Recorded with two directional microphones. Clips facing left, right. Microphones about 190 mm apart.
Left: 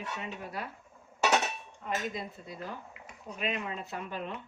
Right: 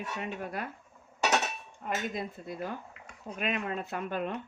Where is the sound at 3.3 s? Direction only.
55° right (ahead or behind).